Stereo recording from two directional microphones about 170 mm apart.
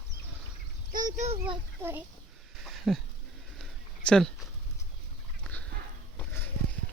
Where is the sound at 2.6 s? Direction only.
Centre (ahead or behind).